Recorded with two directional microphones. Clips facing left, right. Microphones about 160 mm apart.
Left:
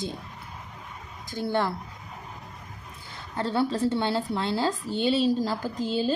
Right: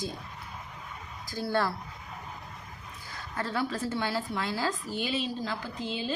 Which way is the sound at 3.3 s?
30° left (ahead or behind).